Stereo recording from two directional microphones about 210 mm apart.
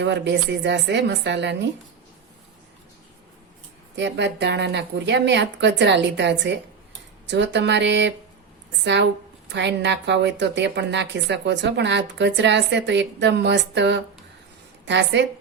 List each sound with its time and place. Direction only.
0.0 s a woman's voice: 55° right (ahead or behind)
3.9 s a woman's voice: 55° right (ahead or behind)